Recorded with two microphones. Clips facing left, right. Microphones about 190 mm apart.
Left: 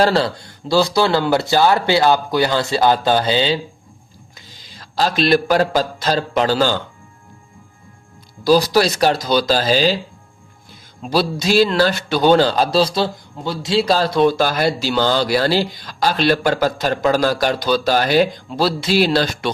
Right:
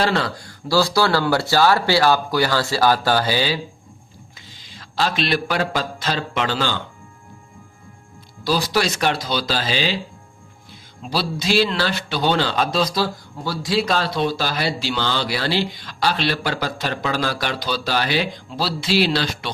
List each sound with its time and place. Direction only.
0.0 s speech: 35° left (ahead or behind)
4.4 s speech: 40° left (ahead or behind)
8.4 s speech: 40° left (ahead or behind)